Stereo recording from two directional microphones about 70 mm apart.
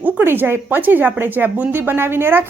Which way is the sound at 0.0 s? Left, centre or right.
Right.